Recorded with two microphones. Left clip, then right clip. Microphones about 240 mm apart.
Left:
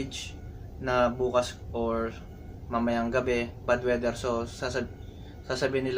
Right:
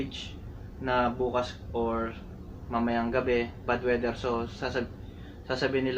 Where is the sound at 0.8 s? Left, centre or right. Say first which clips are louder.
Left 2 dB; centre.